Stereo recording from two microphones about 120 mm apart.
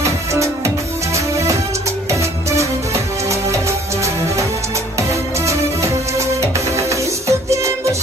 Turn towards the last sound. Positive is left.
turn(degrees=-25)  # may be behind; listen again after turning